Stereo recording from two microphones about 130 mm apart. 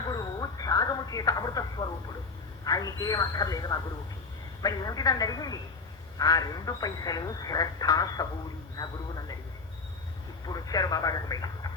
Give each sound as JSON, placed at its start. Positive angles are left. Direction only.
{"t": 0.1, "sound": "a sound", "side_deg": 30}
{"t": 2.6, "sound": "speech", "side_deg": 30}
{"t": 10.4, "sound": "speech", "side_deg": 30}